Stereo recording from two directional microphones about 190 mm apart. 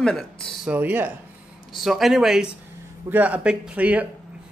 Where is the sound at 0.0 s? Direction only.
5° left (ahead or behind).